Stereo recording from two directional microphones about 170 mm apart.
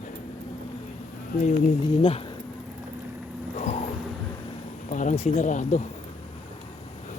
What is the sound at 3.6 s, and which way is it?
Vehicle, 40° left (ahead or behind).